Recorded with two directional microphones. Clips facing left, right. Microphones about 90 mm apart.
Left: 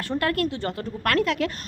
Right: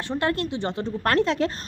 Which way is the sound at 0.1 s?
25° right (ahead or behind).